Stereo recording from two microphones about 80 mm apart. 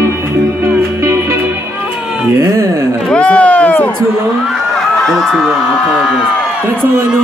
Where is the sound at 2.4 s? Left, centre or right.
Right.